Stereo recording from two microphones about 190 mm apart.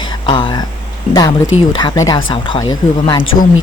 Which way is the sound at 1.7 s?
20° left (ahead or behind).